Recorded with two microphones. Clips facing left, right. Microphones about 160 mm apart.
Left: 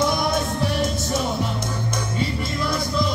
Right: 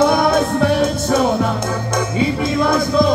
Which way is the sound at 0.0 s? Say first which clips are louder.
Right 8 dB; 60° right (ahead or behind).